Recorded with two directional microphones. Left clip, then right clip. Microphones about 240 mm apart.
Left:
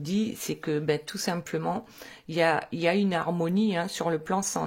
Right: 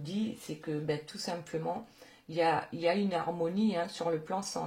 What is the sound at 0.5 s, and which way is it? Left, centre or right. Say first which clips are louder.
Speech: left 8 dB; left.